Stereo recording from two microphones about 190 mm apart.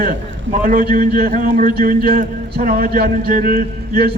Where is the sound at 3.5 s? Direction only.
55° right (ahead or behind).